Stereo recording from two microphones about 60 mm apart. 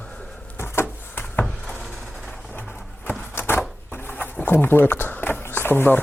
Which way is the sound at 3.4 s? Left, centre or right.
Left.